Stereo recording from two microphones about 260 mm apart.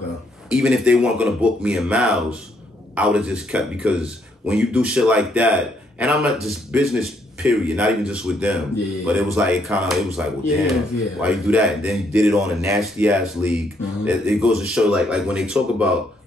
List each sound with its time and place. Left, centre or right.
0.5 s a man's voice: centre